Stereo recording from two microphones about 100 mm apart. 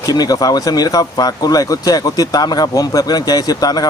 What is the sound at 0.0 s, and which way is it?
Speech, 40° left (ahead or behind).